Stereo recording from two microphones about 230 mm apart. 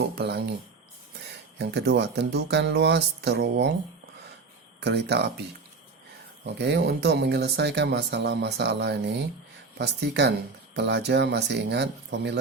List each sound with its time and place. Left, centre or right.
0.2 s speech: right
1.5 s speech: right
4.8 s speech: right
6.4 s speech: right